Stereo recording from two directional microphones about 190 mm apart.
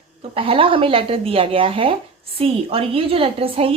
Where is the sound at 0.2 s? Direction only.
30° right (ahead or behind).